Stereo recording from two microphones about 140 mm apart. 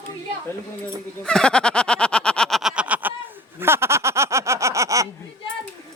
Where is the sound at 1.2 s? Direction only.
5° left (ahead or behind).